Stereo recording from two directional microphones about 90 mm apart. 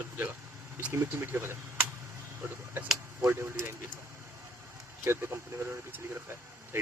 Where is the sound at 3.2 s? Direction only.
30° right (ahead or behind).